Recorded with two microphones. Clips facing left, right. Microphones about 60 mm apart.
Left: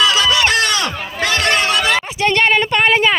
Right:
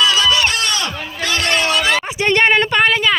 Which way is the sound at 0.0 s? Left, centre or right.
Left.